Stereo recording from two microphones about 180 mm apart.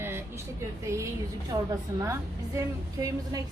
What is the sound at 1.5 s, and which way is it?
A woman's voice, 20° right (ahead or behind).